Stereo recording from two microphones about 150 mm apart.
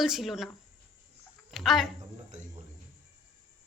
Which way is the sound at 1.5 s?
Centre (ahead or behind).